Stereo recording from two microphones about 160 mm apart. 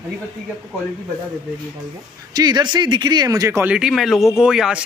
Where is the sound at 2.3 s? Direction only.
25° right (ahead or behind).